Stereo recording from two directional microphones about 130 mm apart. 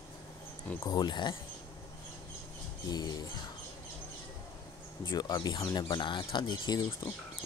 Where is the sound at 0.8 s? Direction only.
35° left (ahead or behind).